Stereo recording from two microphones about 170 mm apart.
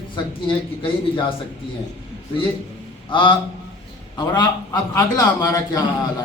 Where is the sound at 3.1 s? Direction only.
30° left (ahead or behind).